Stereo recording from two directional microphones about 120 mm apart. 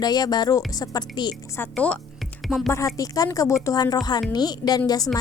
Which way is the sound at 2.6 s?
25° left (ahead or behind).